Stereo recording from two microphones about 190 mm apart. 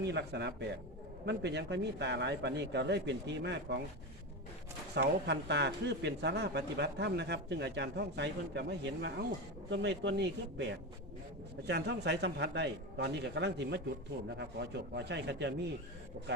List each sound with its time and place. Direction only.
0.0 s speech: 65° right (ahead or behind)
4.9 s speech: 65° right (ahead or behind)